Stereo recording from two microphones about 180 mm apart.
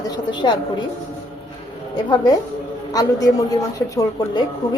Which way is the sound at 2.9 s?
20° left (ahead or behind).